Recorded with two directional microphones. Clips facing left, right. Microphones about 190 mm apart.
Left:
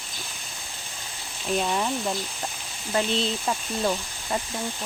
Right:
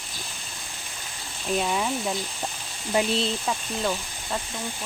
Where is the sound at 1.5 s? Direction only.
Centre (ahead or behind).